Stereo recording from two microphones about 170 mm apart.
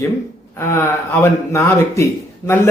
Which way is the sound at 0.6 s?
15° left (ahead or behind).